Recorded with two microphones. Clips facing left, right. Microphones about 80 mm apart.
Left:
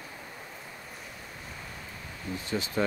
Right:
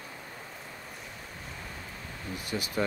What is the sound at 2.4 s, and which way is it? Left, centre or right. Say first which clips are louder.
Speech: left 2 dB; left.